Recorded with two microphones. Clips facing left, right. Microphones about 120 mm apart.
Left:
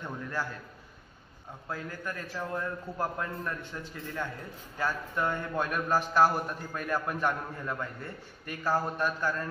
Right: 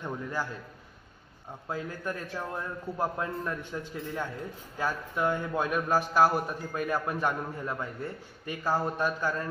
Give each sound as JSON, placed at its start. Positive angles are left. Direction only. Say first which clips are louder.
{"t": 0.0, "sound": "a man's voice", "louder": "right 2 dB", "side_deg": -10}
{"t": 1.7, "sound": "a man's voice", "louder": "right 3 dB", "side_deg": -15}